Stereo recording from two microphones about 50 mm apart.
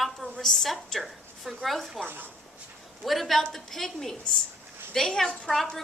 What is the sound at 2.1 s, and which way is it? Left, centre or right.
Speech, right.